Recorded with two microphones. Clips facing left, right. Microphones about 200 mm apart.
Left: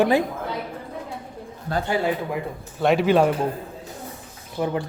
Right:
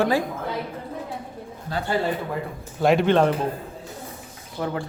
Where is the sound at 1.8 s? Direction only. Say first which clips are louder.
Even; 15° left (ahead or behind).